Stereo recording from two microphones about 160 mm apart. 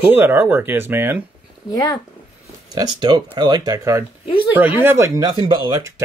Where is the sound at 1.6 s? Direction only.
25° left (ahead or behind).